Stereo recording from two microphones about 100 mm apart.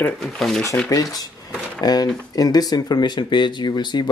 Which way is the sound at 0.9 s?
35° left (ahead or behind).